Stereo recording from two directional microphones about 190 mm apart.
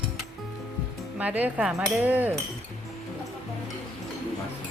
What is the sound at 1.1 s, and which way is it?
Dishes, 10° right (ahead or behind).